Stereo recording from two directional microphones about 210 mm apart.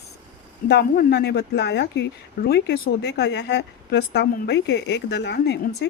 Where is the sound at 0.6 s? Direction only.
50° left (ahead or behind).